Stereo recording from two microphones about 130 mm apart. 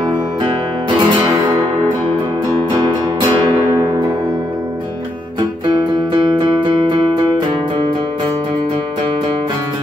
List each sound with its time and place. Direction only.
0.9 s music: 40° right (ahead or behind)
2.8 s music: 35° right (ahead or behind)
3.7 s music: 20° right (ahead or behind)
6.1 s music: 35° right (ahead or behind)